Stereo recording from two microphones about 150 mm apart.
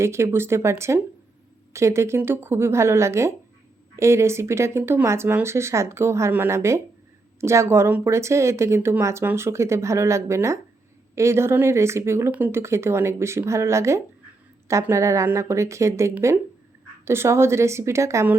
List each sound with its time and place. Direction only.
0.0 s speech: 15° right (ahead or behind)